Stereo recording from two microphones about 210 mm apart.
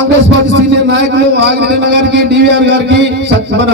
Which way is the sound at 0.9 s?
55° right (ahead or behind).